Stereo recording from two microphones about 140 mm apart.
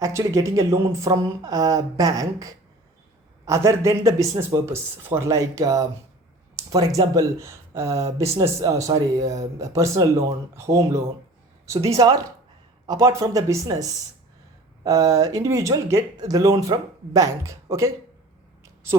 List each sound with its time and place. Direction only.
0.0 s speech: 25° right (ahead or behind)